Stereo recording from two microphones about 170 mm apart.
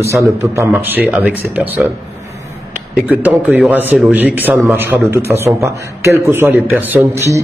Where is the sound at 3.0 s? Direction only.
10° right (ahead or behind).